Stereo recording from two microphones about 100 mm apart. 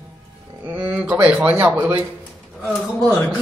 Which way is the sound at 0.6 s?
20° right (ahead or behind).